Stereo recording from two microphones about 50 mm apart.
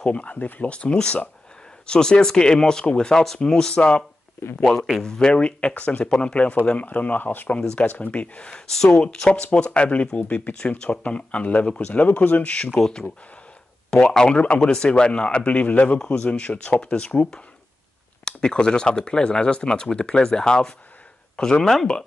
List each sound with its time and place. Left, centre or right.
0.0 s speech: left
6.9 s speech: left; by 8.9 s centre
9.3 s speech: left
12.7 s speech: centre